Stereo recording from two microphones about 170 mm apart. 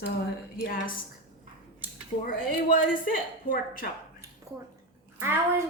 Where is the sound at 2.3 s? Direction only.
55° left (ahead or behind).